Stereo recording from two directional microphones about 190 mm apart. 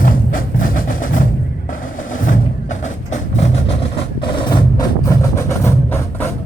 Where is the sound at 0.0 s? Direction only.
45° left (ahead or behind).